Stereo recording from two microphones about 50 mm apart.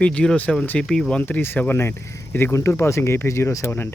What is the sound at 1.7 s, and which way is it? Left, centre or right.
Speech, left.